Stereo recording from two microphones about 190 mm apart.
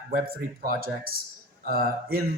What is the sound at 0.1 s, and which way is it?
A man's voice, 50° right (ahead or behind).